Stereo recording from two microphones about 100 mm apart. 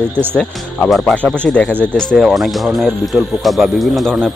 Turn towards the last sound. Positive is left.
turn(degrees=5)  # may be behind; listen again after turning